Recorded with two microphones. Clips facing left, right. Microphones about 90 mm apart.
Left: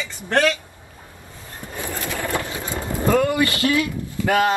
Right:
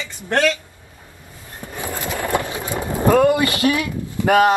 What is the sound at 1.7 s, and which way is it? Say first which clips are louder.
Vehicle: right 2 dB; 20° right (ahead or behind).